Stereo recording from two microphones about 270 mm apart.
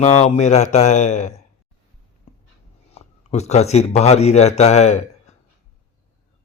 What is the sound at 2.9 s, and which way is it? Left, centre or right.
Speech, left.